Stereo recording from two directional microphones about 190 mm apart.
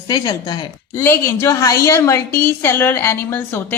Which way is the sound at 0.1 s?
20° left (ahead or behind).